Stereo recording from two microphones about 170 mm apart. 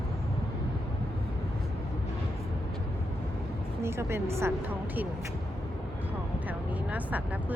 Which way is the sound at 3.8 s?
15° right (ahead or behind).